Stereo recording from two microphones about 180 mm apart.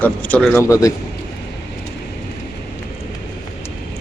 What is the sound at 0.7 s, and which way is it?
Speech, 20° left (ahead or behind).